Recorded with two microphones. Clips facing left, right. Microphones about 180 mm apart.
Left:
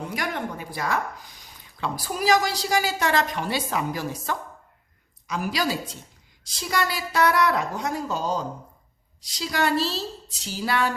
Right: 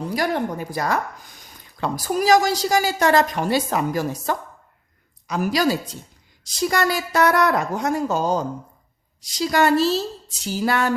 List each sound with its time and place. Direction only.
0.0 s speech: 35° right (ahead or behind)